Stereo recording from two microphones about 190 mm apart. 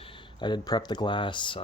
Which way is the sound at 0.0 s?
25° left (ahead or behind).